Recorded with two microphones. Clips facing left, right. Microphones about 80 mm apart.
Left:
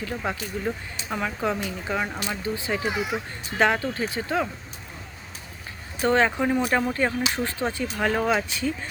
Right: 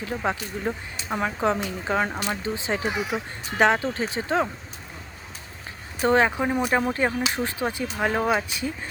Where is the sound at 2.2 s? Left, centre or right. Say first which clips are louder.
Right 1 dB; right.